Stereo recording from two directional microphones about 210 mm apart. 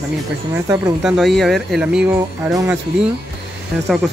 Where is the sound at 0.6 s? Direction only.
20° right (ahead or behind).